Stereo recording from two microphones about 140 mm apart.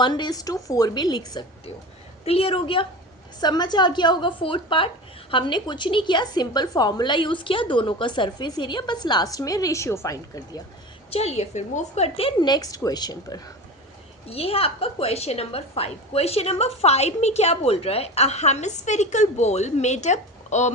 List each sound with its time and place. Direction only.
0.0 s a woman's voice: 30° left (ahead or behind)
2.2 s a woman's voice: 45° left (ahead or behind); by 10.6 s 25° left (ahead or behind)
11.1 s a woman's voice: 50° left (ahead or behind)
12.4 s a woman's voice: 30° left (ahead or behind)
14.3 s a woman's voice: 45° left (ahead or behind)